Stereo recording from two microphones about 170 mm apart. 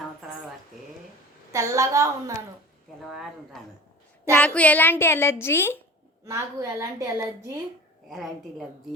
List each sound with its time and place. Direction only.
1.5 s a woman's voice: 20° right (ahead or behind)
3.0 s a sound: centre (ahead or behind)
4.3 s a woman's voice: 10° left (ahead or behind)
6.2 s a woman's voice: 15° right (ahead or behind)
8.1 s a woman's voice: centre (ahead or behind)